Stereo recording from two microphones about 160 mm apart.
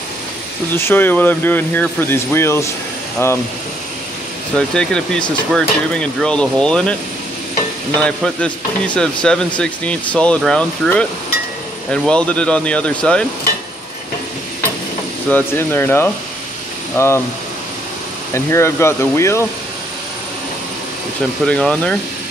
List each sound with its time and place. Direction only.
0.7 s speech: 15° left (ahead or behind)
4.6 s speech: 5° left (ahead or behind)
8.0 s speech: 5° left (ahead or behind)
15.2 s speech: 10° left (ahead or behind)
18.3 s speech: 15° left (ahead or behind)
21.5 s speech: 5° left (ahead or behind)